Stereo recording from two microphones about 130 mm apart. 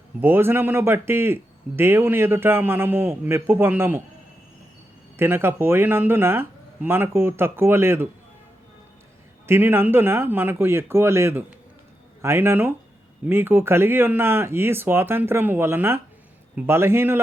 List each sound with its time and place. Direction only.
0.2 s a man's voice: 15° right (ahead or behind)
5.1 s a man's voice: 20° right (ahead or behind)
9.5 s a man's voice: 15° right (ahead or behind)